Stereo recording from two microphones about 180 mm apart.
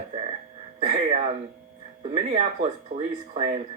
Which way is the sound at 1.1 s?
35° right (ahead or behind).